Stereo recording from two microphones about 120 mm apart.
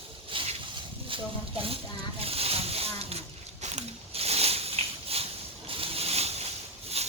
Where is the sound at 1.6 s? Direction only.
55° right (ahead or behind).